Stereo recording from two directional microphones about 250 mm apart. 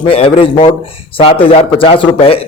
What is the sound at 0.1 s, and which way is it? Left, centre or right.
A man's voice, left.